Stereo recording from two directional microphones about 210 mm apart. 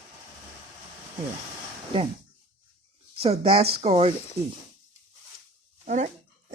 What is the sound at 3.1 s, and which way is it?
Speech, 25° right (ahead or behind).